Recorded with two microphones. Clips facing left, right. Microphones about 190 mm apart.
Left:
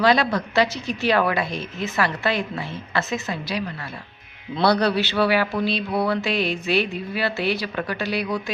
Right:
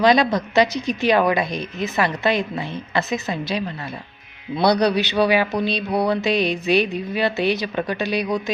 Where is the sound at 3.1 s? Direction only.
20° right (ahead or behind).